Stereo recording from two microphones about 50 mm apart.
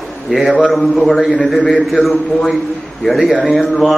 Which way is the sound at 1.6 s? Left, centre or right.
Left.